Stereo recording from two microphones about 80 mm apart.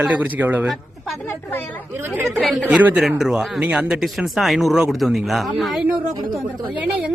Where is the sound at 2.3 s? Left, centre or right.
Centre.